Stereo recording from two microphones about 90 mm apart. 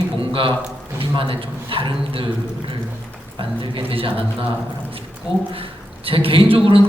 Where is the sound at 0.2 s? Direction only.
70° right (ahead or behind).